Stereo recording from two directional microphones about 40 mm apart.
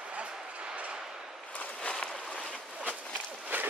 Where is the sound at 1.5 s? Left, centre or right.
Left.